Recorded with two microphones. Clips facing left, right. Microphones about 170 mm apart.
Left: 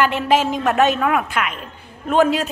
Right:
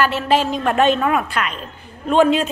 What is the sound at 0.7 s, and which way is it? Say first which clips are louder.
A woman's voice: right 1 dB; 5° left (ahead or behind).